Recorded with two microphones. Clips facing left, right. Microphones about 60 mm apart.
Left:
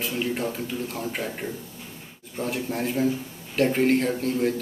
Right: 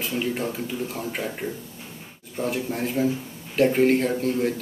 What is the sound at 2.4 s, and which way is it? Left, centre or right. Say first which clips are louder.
Speech: right 1 dB; centre.